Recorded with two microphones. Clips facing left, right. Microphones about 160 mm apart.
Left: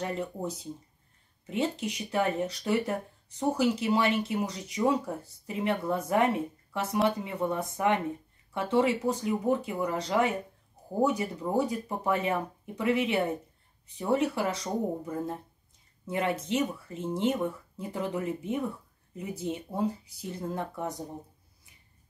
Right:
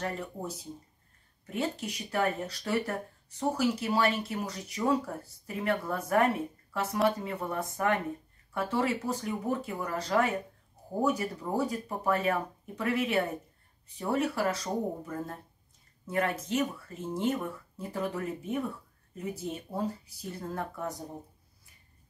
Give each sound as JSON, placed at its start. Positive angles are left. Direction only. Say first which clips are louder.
{"t": 0.0, "sound": "speech", "louder": "left 3 dB", "side_deg": 20}
{"t": 1.4, "sound": "speech", "louder": "left 3 dB", "side_deg": 20}